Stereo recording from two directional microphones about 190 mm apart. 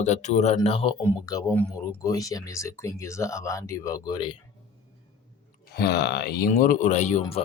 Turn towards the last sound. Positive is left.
turn(degrees=35)  # may be behind; listen again after turning